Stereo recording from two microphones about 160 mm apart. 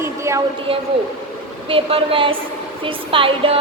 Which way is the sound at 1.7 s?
35° right (ahead or behind).